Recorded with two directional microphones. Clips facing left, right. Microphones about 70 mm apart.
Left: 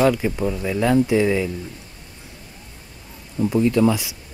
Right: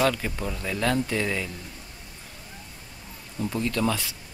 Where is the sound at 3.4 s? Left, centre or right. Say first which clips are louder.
Left 9 dB; centre.